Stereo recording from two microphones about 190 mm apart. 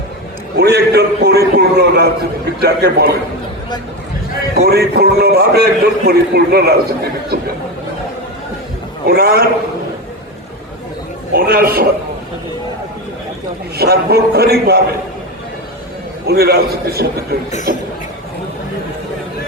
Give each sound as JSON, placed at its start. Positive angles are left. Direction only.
{"t": 0.6, "sound": "a man's voice", "side_deg": -60}
{"t": 4.5, "sound": "a man's voice", "side_deg": -60}
{"t": 9.0, "sound": "a man's voice", "side_deg": -55}
{"t": 11.3, "sound": "a man's voice", "side_deg": -55}
{"t": 13.7, "sound": "a man's voice", "side_deg": -55}
{"t": 16.2, "sound": "a man's voice", "side_deg": -55}
{"t": 17.7, "sound": "a sound", "side_deg": -50}